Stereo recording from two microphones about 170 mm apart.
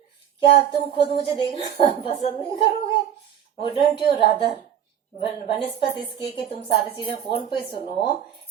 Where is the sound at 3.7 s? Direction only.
30° left (ahead or behind).